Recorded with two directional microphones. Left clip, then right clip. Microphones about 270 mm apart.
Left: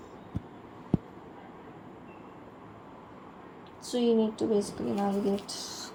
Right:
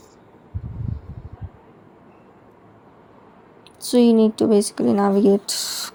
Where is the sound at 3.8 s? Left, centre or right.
Right.